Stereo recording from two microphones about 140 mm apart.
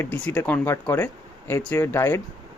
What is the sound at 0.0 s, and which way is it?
Speech, 10° left (ahead or behind).